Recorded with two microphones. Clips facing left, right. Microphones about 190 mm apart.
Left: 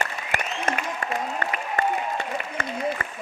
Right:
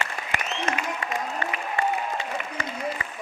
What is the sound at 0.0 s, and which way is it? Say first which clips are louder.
Applause: left 2 dB; 50° left (ahead or behind).